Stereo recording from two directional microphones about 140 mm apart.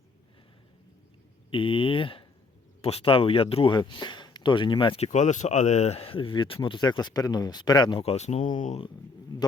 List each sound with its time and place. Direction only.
1.5 s speech: 40° left (ahead or behind)
4.9 s speech: 55° left (ahead or behind); by 8.1 s 35° left (ahead or behind)
8.1 s speech: 50° left (ahead or behind)